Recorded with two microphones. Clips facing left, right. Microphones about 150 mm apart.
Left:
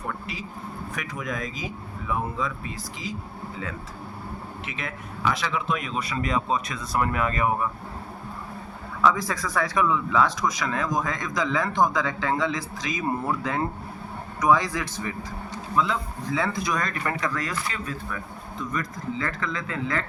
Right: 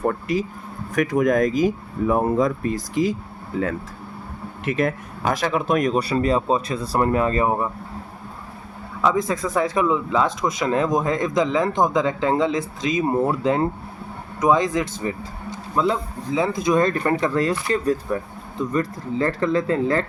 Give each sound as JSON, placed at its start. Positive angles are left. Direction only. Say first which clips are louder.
{"t": 0.0, "sound": "speech", "louder": "right 12 dB", "side_deg": -45}
{"t": 9.0, "sound": "speech", "louder": "right 3 dB", "side_deg": -20}
{"t": 15.7, "sound": "speech", "louder": "right 4 dB", "side_deg": -35}
{"t": 16.3, "sound": "speech", "louder": "right 7 dB", "side_deg": -20}